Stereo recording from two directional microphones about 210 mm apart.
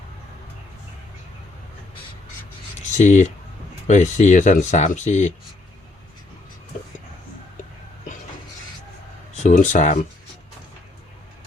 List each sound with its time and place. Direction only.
2.7 s speech: 35° left (ahead or behind)
9.4 s speech: 35° left (ahead or behind)